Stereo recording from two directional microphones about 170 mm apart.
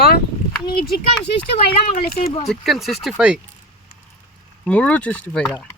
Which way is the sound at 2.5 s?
Centre (ahead or behind).